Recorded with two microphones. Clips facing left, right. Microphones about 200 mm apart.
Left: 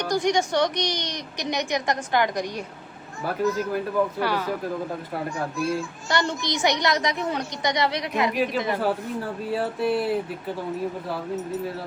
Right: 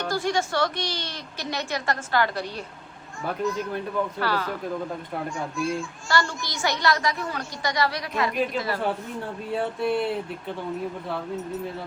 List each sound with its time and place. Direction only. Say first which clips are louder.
0.0 s a woman's voice: left 3 dB; 15° left (ahead or behind)
3.2 s speech: left 3 dB; 5° left (ahead or behind)
6.1 s a woman's voice: left 1 dB; 20° left (ahead or behind)
8.3 s speech: left 2 dB; centre (ahead or behind)